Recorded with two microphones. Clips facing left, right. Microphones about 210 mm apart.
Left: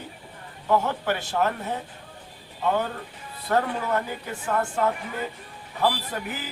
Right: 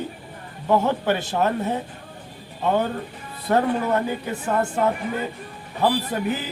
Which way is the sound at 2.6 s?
25° right (ahead or behind).